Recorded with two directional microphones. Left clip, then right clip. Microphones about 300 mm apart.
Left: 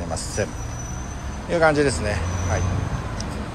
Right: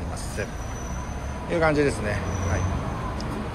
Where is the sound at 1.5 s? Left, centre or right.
Centre.